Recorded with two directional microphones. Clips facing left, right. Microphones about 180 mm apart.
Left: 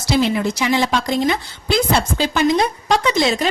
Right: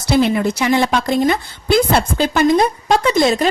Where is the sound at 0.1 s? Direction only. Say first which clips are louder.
Right 3 dB; 55° right (ahead or behind).